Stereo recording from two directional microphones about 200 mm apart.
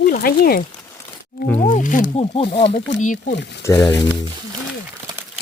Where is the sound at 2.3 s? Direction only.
30° left (ahead or behind).